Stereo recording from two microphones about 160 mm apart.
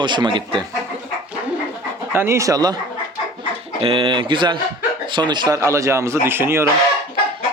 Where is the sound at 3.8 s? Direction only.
35° right (ahead or behind); by 6.6 s 15° right (ahead or behind).